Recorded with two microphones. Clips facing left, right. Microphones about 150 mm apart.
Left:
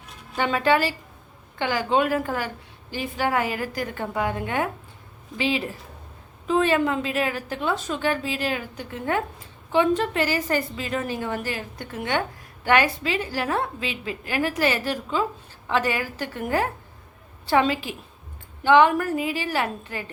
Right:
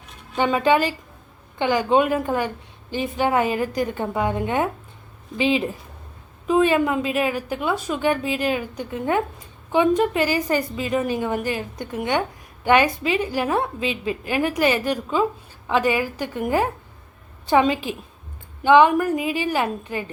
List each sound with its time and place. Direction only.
0.3 s a woman's voice: 20° right (ahead or behind)